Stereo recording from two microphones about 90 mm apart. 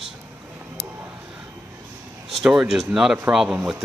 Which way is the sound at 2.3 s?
5° right (ahead or behind).